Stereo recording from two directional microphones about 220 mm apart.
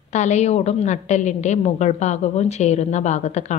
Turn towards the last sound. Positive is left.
turn(degrees=30)  # may be behind; listen again after turning